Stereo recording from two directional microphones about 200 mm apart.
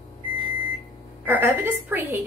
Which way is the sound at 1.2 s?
10° right (ahead or behind).